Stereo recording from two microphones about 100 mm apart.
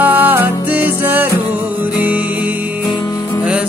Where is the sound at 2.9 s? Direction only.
45° left (ahead or behind).